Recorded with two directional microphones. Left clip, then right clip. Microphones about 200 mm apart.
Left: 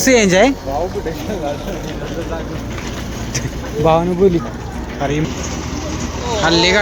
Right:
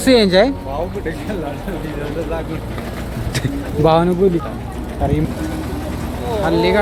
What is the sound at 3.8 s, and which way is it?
Speech, 25° right (ahead or behind).